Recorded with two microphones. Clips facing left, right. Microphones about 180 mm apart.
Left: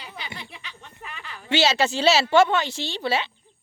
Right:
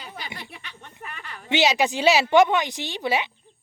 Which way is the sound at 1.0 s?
50° right (ahead or behind).